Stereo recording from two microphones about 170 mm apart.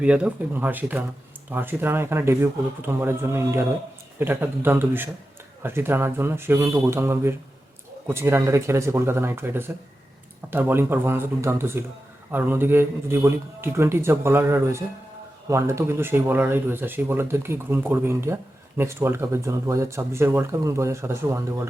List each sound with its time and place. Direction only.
0.0 s speech: 5° right (ahead or behind)